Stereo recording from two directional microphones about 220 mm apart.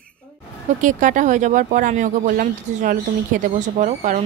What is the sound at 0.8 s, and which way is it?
Speech, 35° right (ahead or behind).